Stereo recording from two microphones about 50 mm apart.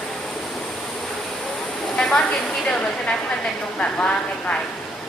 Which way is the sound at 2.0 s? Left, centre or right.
Centre.